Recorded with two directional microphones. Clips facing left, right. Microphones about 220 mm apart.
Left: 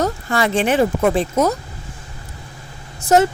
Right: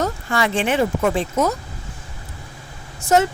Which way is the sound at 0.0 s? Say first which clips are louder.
Left 2 dB; 40° left (ahead or behind).